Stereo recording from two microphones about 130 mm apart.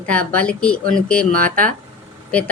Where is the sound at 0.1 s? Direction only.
10° left (ahead or behind).